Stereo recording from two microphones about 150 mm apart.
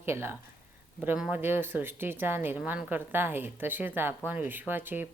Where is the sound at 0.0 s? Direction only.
15° right (ahead or behind).